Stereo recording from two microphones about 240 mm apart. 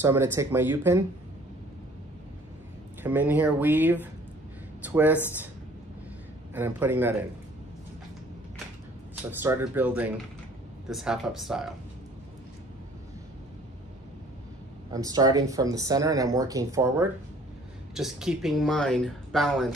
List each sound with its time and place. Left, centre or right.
0.0 s speech: centre
3.0 s speech: centre
6.5 s speech: centre
9.4 s speech: centre
14.9 s speech: centre
17.9 s speech: centre